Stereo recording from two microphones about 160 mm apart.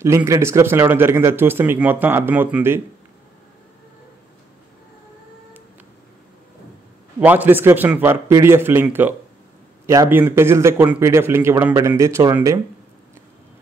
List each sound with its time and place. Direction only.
0.0 s speech: 20° right (ahead or behind)
7.2 s speech: 10° right (ahead or behind)